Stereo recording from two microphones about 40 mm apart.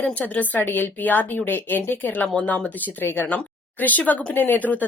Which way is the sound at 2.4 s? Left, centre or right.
Left.